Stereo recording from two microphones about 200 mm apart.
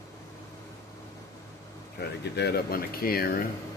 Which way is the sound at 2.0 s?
55° left (ahead or behind).